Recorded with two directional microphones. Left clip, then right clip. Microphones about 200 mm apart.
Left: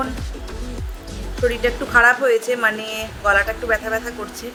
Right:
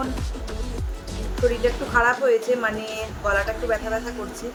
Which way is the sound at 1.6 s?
20° left (ahead or behind).